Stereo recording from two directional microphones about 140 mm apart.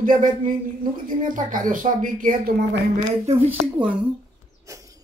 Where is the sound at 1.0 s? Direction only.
75° right (ahead or behind).